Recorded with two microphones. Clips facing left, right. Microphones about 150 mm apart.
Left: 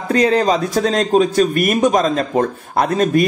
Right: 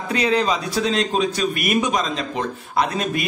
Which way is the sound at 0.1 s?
45° left (ahead or behind).